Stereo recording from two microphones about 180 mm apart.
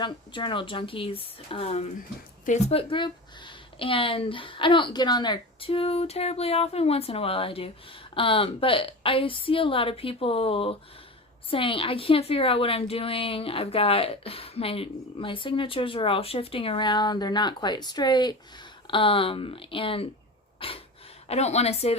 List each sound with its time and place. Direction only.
0.0 s a woman's voice: 25° left (ahead or behind)
20.6 s breathing: 30° left (ahead or behind)
21.2 s a woman's voice: 35° left (ahead or behind)